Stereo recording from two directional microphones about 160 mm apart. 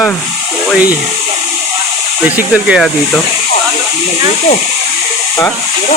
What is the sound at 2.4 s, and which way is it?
Speech, 5° right (ahead or behind).